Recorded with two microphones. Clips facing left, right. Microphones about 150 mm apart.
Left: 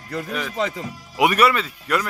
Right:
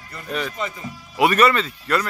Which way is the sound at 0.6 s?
90° left.